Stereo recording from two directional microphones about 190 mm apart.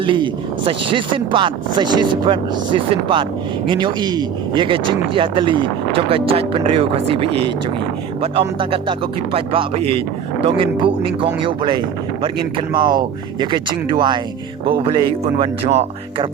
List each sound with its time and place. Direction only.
0.0 s speech: 25° right (ahead or behind)